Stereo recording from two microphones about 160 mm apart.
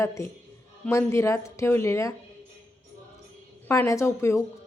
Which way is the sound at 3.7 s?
20° left (ahead or behind).